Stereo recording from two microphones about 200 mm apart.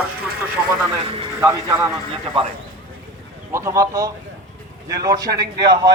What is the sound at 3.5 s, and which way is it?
A man's voice, 15° right (ahead or behind).